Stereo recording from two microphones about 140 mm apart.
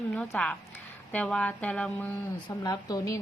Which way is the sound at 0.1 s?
10° left (ahead or behind).